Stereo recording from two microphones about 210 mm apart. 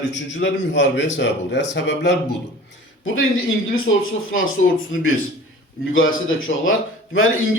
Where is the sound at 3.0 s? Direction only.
70° left (ahead or behind).